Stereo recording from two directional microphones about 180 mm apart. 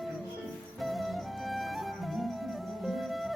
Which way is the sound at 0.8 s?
Centre (ahead or behind).